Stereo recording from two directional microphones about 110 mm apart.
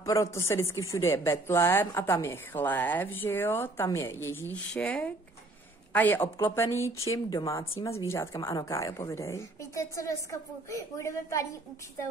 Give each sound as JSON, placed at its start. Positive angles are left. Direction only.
{"t": 0.0, "sound": "a woman's voice", "side_deg": 30}
{"t": 7.2, "sound": "speech", "side_deg": 35}